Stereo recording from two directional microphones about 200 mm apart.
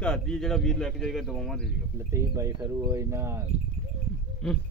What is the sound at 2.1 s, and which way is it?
Speech, 15° right (ahead or behind).